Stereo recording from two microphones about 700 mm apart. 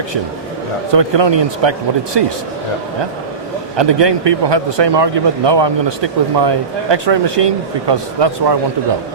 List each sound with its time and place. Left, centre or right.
0.9 s speech: right
3.8 s speech: right